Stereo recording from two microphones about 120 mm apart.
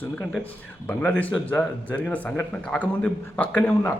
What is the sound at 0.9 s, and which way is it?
A man's voice, 15° left (ahead or behind).